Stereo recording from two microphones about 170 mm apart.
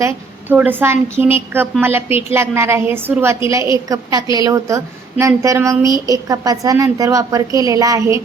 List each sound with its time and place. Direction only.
0.0 s a woman's voice: 10° right (ahead or behind)